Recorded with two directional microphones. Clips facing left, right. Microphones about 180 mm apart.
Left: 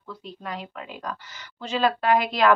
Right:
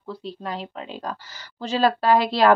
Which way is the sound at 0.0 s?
30° right (ahead or behind).